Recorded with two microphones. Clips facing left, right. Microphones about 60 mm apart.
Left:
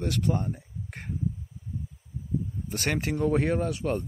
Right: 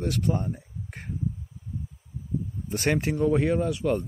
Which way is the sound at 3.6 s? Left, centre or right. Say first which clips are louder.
Right 2 dB; left.